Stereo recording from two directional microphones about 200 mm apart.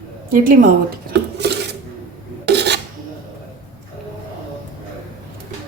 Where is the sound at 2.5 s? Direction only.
55° right (ahead or behind).